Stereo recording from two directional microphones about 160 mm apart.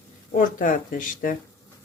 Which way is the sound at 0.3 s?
55° left (ahead or behind).